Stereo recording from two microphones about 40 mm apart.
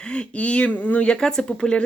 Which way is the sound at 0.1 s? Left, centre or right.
Left.